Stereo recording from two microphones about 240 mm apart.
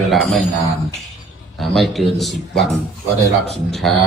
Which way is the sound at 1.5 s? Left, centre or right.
Centre.